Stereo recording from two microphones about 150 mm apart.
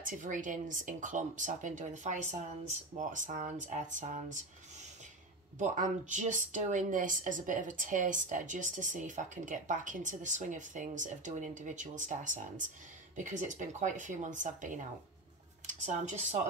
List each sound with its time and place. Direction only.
0.0 s speech: 60° right (ahead or behind)
5.6 s speech: 55° right (ahead or behind)